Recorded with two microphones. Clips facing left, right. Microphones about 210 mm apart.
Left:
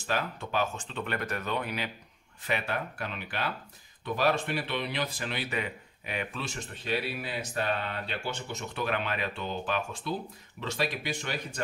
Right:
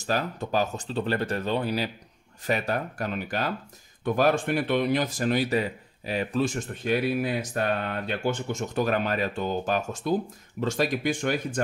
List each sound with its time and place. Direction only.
0.0 s speech: 40° right (ahead or behind)
6.4 s speech: 50° right (ahead or behind)